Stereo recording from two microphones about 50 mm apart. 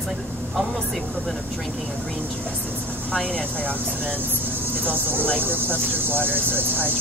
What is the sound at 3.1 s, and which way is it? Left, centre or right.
Speech, left.